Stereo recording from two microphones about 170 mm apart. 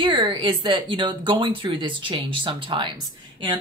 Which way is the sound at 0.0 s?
25° right (ahead or behind).